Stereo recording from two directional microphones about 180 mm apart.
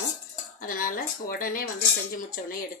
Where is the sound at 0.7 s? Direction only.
50° left (ahead or behind).